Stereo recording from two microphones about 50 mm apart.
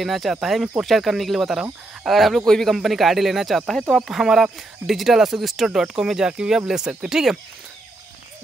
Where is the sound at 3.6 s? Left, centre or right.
Centre.